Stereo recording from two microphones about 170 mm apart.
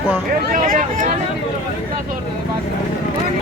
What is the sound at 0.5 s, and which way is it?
Speech, 55° right (ahead or behind).